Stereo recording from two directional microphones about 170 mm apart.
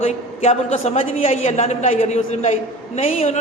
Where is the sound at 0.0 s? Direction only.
40° left (ahead or behind).